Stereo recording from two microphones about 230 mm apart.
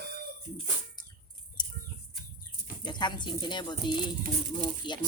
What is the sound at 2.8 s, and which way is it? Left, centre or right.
Speech, centre.